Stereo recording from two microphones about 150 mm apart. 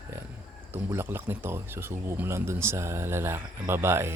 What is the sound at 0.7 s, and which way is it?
Speech, 15° right (ahead or behind).